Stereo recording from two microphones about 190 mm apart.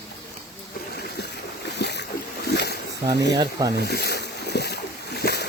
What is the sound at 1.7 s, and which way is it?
Boat, 65° left (ahead or behind).